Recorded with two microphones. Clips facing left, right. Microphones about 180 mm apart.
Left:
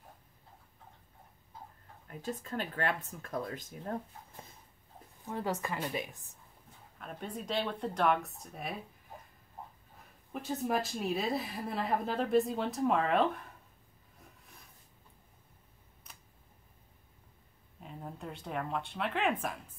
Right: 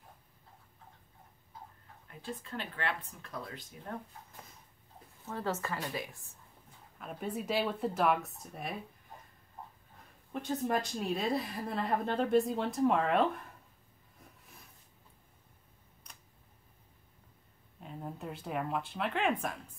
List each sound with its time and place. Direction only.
2.0 s speech: 45° left (ahead or behind)
5.2 s a woman's voice: 15° left (ahead or behind)
7.0 s a woman's voice: 5° right (ahead or behind)
10.3 s a woman's voice: 5° left (ahead or behind)
14.2 s a sound: centre (ahead or behind)
17.7 s a woman's voice: centre (ahead or behind)